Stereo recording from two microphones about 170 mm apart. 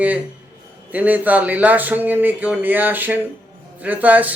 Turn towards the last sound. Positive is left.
turn(degrees=-10)  # may be behind; listen again after turning